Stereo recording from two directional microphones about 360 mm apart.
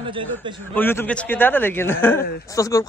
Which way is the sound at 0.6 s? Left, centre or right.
Centre.